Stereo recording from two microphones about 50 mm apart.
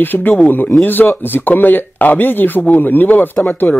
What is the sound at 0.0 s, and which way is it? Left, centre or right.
Speech, left.